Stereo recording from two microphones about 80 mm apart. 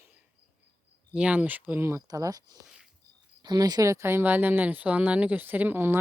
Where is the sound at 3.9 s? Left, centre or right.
Right.